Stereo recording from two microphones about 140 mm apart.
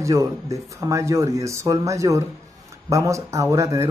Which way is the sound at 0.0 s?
25° right (ahead or behind).